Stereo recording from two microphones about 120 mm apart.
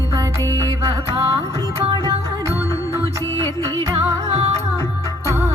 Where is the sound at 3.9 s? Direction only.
55° right (ahead or behind).